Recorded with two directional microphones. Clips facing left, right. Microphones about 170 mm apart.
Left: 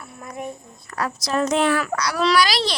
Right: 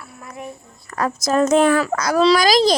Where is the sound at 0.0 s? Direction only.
20° left (ahead or behind).